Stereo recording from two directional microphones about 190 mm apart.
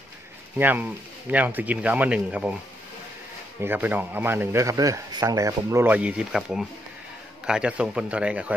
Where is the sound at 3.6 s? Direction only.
10° right (ahead or behind).